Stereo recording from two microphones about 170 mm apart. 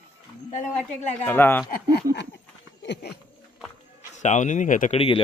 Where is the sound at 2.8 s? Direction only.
90° left.